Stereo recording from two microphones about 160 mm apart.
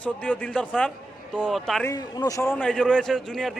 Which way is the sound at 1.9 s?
25° left (ahead or behind).